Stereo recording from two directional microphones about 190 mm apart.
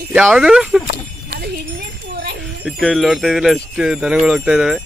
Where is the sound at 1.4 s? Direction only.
55° right (ahead or behind).